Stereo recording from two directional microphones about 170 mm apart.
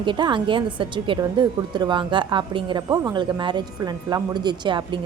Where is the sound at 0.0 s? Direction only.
30° right (ahead or behind).